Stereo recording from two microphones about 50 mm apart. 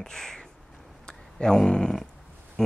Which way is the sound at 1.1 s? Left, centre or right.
Centre.